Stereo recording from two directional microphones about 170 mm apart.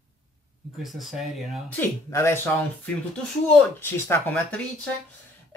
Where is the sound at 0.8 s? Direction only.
Centre (ahead or behind).